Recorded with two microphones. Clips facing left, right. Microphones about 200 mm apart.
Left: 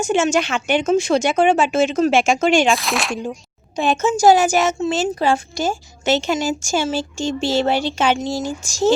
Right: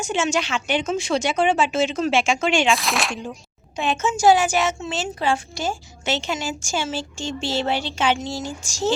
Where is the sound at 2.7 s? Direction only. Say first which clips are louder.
Left 2 dB; centre (ahead or behind).